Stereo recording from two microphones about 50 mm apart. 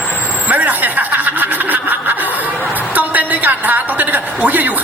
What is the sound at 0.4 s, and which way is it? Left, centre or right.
Chuckle, right.